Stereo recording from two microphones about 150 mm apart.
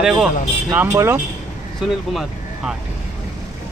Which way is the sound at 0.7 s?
15° right (ahead or behind).